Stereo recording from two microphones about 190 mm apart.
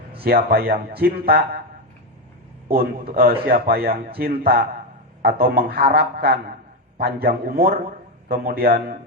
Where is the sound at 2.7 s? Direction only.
50° right (ahead or behind).